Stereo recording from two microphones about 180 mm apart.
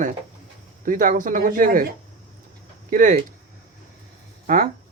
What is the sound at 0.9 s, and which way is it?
Speech, 45° right (ahead or behind).